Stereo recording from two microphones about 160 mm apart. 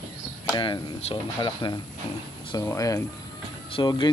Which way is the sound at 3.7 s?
30° left (ahead or behind).